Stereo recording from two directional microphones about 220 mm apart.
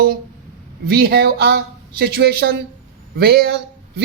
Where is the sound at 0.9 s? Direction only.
45° right (ahead or behind).